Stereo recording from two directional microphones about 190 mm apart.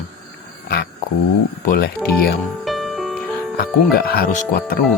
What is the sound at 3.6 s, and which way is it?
Speech, 55° left (ahead or behind).